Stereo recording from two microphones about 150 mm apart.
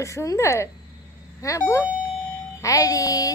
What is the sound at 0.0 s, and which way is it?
Speech, 20° left (ahead or behind).